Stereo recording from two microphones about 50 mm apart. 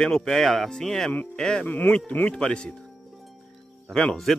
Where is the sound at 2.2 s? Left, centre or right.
Centre.